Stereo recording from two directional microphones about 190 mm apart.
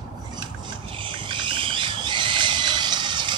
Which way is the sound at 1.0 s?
25° right (ahead or behind).